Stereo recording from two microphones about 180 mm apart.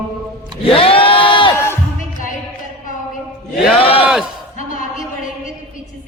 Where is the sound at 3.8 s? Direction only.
30° left (ahead or behind).